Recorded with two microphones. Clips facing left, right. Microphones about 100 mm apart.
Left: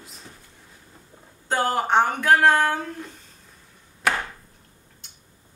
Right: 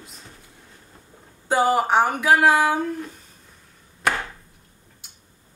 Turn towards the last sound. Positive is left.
turn(degrees=0)  # may be behind; listen again after turning